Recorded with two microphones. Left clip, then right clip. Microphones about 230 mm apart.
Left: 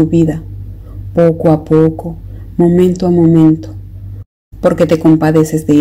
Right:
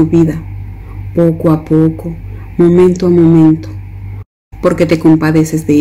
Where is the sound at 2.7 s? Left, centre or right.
Centre.